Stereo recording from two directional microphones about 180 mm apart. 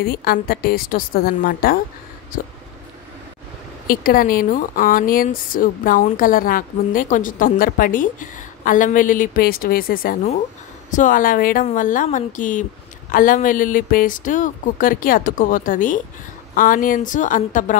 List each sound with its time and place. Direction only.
0.0 s a woman's voice: 55° left (ahead or behind)
3.8 s speech: 50° left (ahead or behind)